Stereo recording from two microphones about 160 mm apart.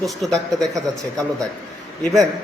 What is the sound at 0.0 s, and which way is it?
Speech, centre (ahead or behind).